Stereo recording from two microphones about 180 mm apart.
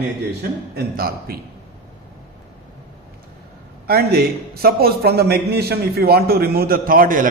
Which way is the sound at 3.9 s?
60° right (ahead or behind).